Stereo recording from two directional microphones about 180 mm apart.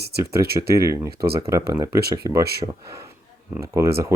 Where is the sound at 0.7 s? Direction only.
15° right (ahead or behind).